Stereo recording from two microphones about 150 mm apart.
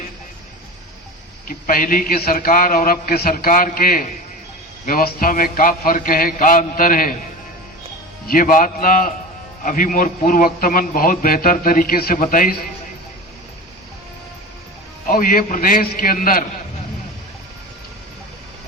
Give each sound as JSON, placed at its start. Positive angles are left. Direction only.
{"t": 1.5, "sound": "a man's voice", "side_deg": 65}
{"t": 8.3, "sound": "a man's voice", "side_deg": 65}
{"t": 15.0, "sound": "a man's voice", "side_deg": 65}